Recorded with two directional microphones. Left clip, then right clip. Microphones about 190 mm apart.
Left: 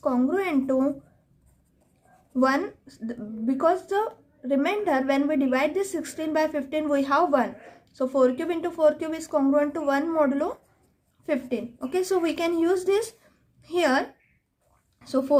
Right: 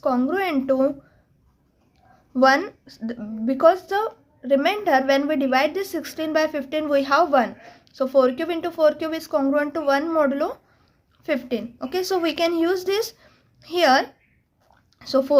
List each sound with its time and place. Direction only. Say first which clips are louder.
0.0 s speech: right 3 dB; 25° right (ahead or behind)
2.4 s speech: right 6 dB; 25° right (ahead or behind)